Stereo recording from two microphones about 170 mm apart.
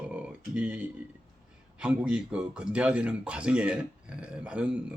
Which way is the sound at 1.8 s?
5° right (ahead or behind).